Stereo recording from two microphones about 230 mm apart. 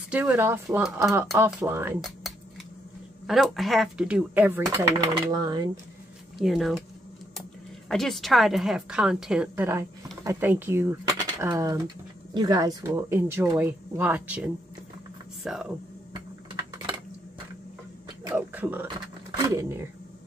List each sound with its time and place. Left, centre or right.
0.1 s a woman's voice: centre
3.3 s a woman's voice: centre
6.3 s speech: centre
7.9 s a woman's voice: centre
18.2 s a sound: centre
19.3 s speech: centre